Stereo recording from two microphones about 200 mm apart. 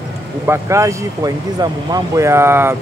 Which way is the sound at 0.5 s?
15° right (ahead or behind).